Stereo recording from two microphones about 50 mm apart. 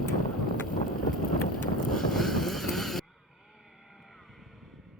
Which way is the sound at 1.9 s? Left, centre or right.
Centre.